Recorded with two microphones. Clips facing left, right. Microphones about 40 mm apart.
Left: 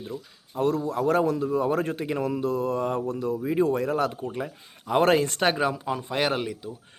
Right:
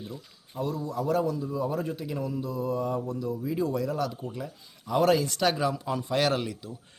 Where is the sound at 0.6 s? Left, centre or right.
Left; by 6.7 s centre.